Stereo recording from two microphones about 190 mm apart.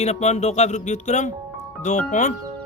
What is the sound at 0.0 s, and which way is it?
Speech, 35° left (ahead or behind).